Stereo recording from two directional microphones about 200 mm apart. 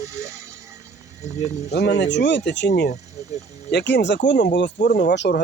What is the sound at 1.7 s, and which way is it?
Speech, 60° left (ahead or behind).